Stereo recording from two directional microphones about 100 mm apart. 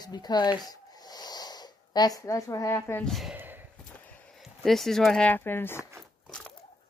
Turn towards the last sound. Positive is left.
turn(degrees=25)  # may be behind; listen again after turning